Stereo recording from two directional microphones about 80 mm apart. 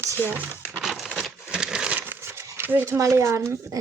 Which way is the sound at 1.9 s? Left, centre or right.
Right.